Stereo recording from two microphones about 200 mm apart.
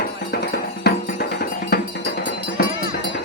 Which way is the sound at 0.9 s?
55° left (ahead or behind).